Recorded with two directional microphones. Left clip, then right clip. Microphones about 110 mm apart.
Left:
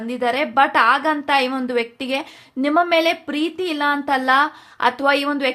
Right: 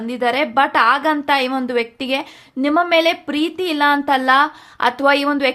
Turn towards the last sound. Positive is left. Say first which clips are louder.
# right 3 dB
turn(degrees=-20)  # may be behind; listen again after turning